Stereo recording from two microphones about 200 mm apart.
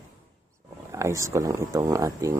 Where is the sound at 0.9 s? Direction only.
15° right (ahead or behind).